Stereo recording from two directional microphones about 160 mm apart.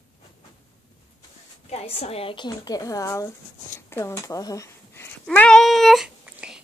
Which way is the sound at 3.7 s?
15° left (ahead or behind).